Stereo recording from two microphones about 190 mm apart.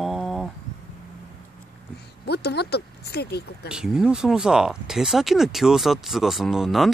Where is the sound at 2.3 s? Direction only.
60° left (ahead or behind).